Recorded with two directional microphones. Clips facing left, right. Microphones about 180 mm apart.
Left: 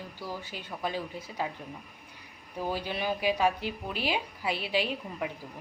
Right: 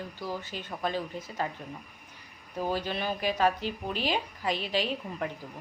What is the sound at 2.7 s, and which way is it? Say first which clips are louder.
A woman's voice: even; 10° left (ahead or behind).